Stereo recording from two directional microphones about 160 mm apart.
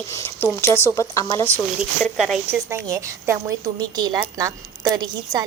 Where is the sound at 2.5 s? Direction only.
20° right (ahead or behind).